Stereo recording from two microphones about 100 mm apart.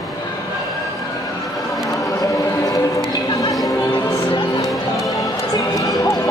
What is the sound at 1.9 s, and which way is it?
Chatter, 35° left (ahead or behind).